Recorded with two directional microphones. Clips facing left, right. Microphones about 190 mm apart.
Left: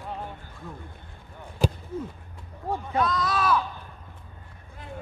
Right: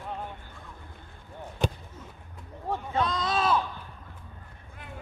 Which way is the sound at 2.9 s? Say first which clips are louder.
Left 2 dB; 25° right (ahead or behind).